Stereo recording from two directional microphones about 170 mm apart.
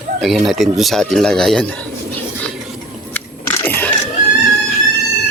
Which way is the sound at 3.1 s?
15° left (ahead or behind).